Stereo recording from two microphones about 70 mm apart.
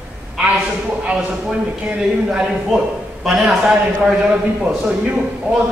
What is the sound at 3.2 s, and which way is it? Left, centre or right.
Speech, centre.